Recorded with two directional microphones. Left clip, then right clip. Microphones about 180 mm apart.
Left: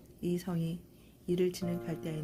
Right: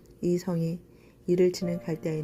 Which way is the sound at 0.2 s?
20° right (ahead or behind).